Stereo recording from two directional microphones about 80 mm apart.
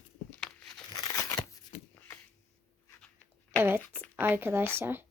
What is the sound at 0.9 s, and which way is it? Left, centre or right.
Crumpling, left.